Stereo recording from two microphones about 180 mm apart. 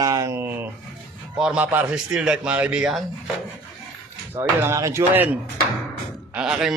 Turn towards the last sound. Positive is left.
turn(degrees=-5)  # may be behind; listen again after turning